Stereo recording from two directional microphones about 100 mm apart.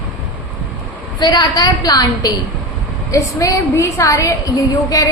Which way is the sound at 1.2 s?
40° left (ahead or behind).